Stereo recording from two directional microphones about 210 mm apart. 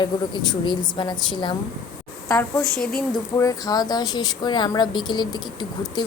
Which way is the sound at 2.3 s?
10° left (ahead or behind).